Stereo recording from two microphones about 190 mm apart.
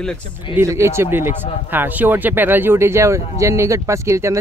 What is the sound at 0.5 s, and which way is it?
Speech, 15° right (ahead or behind).